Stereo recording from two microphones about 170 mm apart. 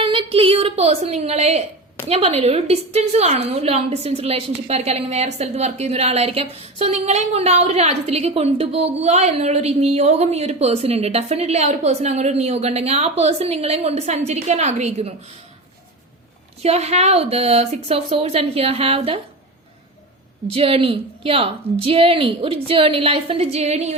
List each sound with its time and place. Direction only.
0.0 s a sound: 30° right (ahead or behind)
2.0 s a woman's voice: 35° right (ahead or behind)
16.6 s a woman's voice: 40° right (ahead or behind)
20.5 s a woman's voice: 35° right (ahead or behind)